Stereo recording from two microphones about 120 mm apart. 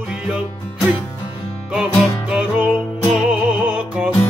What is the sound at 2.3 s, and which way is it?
Music, 10° right (ahead or behind).